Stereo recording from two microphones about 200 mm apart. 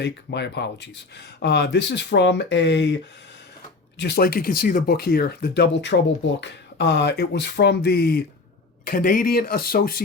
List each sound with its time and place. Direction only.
0.0 s speech: 60° left (ahead or behind)